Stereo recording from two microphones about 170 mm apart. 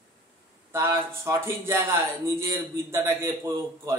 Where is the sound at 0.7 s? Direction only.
15° right (ahead or behind).